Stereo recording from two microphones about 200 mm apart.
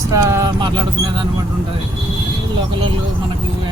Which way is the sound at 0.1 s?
15° right (ahead or behind).